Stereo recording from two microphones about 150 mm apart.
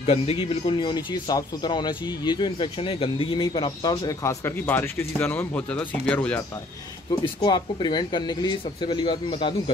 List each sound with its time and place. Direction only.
0.0 s speech: 40° left (ahead or behind); by 6.4 s 10° left (ahead or behind)
7.4 s speech: 30° left (ahead or behind)